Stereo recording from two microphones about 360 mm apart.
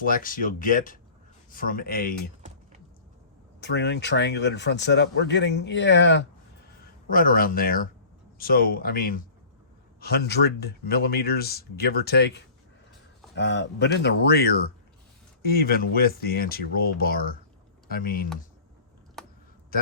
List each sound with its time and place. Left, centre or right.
0.0 s speech: left
3.6 s speech: left